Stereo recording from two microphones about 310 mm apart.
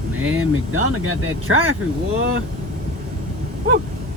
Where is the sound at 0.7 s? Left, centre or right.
Right.